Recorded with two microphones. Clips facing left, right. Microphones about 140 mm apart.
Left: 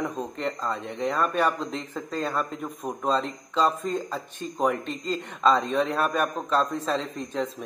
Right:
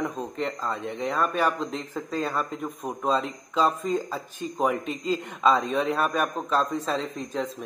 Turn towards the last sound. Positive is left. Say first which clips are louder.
# even
turn(degrees=0)  # may be behind; listen again after turning